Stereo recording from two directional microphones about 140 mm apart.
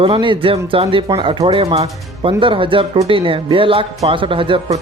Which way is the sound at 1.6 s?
45° right (ahead or behind).